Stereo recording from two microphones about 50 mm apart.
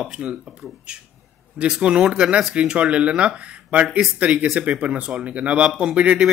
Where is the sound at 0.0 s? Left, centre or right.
Centre.